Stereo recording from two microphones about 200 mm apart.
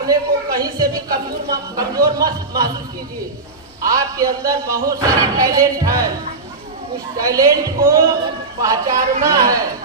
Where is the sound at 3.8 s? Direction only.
15° right (ahead or behind).